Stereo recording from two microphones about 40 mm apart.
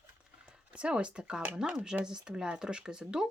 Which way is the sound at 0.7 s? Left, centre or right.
Right.